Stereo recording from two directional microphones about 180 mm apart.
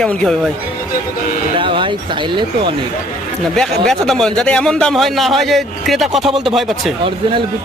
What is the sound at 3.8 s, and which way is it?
A man's voice, centre (ahead or behind).